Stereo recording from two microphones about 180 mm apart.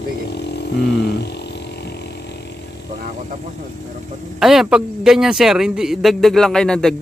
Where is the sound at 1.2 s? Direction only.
65° left (ahead or behind).